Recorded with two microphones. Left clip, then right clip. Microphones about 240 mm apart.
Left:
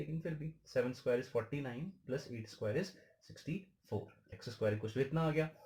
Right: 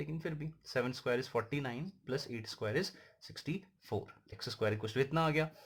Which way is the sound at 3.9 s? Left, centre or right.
Right.